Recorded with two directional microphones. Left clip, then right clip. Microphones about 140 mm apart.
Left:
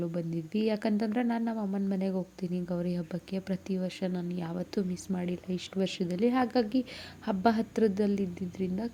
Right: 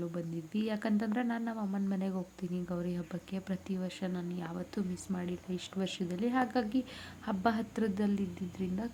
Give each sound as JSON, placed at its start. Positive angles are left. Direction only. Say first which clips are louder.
{"t": 0.1, "sound": "speech", "louder": "left 5 dB", "side_deg": 25}